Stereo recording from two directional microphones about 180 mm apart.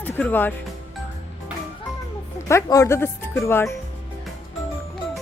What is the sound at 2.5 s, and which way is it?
Speech, 15° left (ahead or behind).